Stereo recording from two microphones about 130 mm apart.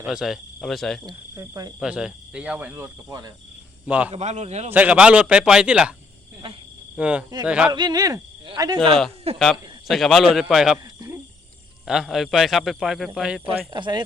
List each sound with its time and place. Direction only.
0.0 s a man's voice: 5° right (ahead or behind)
1.0 s speech: 30° right (ahead or behind)
1.8 s speech: 5° right (ahead or behind); by 3.3 s 25° right (ahead or behind)
3.8 s speech: 10° right (ahead or behind)
4.1 s a man's voice: 60° right (ahead or behind)
4.7 s speech: 10° right (ahead or behind)
6.4 s speech: 45° right (ahead or behind)
6.9 s speech: 10° right (ahead or behind)
7.7 s speech: 30° right (ahead or behind)
8.9 s a man's voice: 5° left (ahead or behind)
11.9 s a man's voice: 5° right (ahead or behind)
13.7 s speech: 40° right (ahead or behind)